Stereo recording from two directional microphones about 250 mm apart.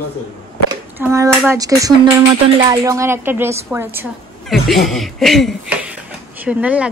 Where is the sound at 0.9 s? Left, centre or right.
Centre.